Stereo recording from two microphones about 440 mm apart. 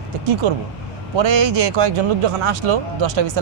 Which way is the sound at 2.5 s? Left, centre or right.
Right.